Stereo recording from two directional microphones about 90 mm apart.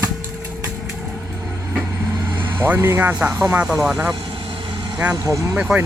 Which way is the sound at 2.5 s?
25° right (ahead or behind).